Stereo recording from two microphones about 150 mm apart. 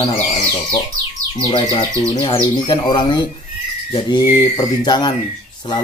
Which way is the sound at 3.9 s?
40° left (ahead or behind).